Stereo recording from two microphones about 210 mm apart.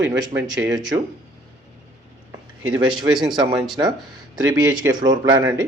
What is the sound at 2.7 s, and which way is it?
Speech, 20° right (ahead or behind).